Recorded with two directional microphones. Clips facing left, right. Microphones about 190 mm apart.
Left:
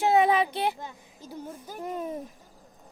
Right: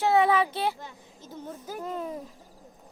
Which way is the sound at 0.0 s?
15° left (ahead or behind).